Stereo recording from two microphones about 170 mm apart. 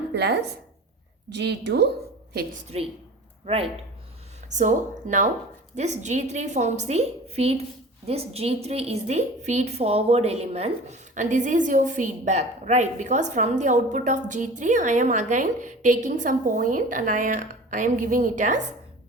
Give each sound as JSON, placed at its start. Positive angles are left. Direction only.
{"t": 0.1, "sound": "a woman's voice", "side_deg": -75}
{"t": 2.7, "sound": "speech", "side_deg": -35}
{"t": 4.4, "sound": "a woman's voice", "side_deg": -45}